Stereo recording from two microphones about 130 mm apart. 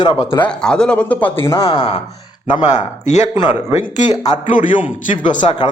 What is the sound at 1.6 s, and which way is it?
Speech, 45° left (ahead or behind).